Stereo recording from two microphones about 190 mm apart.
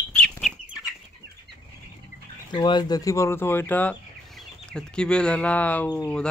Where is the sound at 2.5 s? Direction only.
25° left (ahead or behind); by 6.3 s 5° left (ahead or behind).